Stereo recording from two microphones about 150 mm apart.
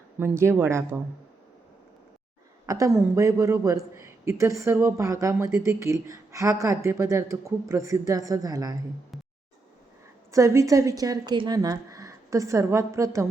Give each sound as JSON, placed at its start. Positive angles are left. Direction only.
{"t": 0.2, "sound": "speech", "side_deg": -15}
{"t": 2.6, "sound": "a man's voice", "side_deg": -20}
{"t": 10.3, "sound": "a man's voice", "side_deg": -20}